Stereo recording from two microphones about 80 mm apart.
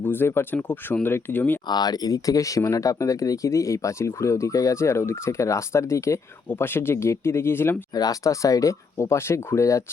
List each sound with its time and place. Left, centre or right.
0.0 s speech: left
1.6 s speech: left
7.9 s speech: left